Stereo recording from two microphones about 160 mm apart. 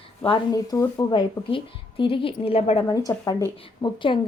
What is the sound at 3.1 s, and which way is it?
Speech, 20° left (ahead or behind).